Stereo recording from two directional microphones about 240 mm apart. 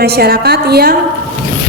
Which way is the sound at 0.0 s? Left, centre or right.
Right.